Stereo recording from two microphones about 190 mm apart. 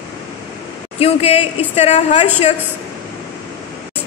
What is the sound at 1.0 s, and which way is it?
A woman's voice, 30° left (ahead or behind).